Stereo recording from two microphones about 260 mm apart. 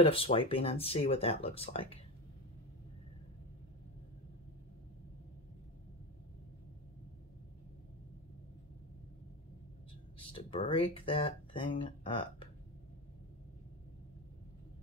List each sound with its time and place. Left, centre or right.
0.0 s speech: left
10.1 s speech: centre